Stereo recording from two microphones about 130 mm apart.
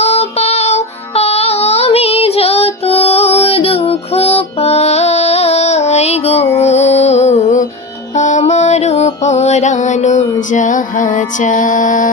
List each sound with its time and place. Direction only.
0.0 s child singing: 55° left (ahead or behind)
6.6 s music: 55° left (ahead or behind); by 12.1 s 85° left